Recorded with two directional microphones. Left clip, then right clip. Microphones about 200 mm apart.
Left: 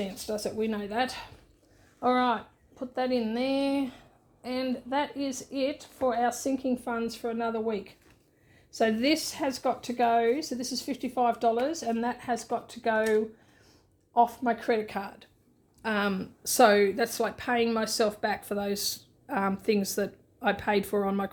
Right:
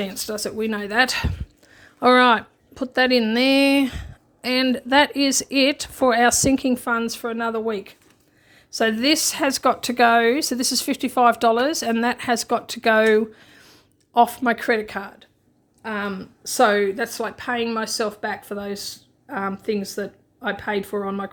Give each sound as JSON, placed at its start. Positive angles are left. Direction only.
{"t": 0.0, "sound": "speech", "side_deg": -30}
{"t": 15.8, "sound": "a woman's voice", "side_deg": 5}